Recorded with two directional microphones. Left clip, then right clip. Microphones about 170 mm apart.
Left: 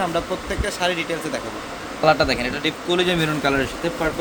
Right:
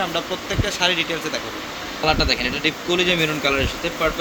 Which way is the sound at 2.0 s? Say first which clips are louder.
Left 2 dB; 60° left (ahead or behind).